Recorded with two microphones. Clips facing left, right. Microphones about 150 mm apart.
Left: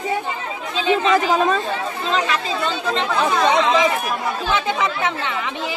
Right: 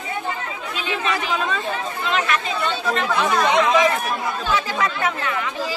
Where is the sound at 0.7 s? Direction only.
30° left (ahead or behind).